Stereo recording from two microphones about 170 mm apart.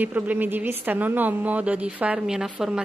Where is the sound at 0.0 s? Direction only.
10° right (ahead or behind).